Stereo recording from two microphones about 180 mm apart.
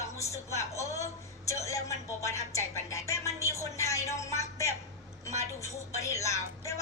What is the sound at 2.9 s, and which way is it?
A woman's voice, 15° left (ahead or behind).